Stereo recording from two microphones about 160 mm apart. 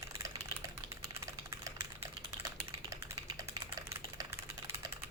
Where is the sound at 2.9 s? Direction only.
20° right (ahead or behind).